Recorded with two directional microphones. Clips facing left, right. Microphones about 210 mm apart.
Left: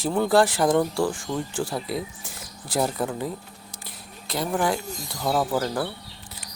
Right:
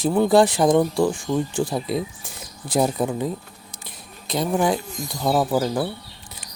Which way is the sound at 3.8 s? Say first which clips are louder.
Right 3 dB; 20° right (ahead or behind).